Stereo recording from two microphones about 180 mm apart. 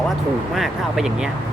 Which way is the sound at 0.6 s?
Centre (ahead or behind).